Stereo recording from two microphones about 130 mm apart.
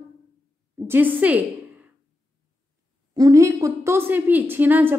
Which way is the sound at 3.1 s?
25° right (ahead or behind).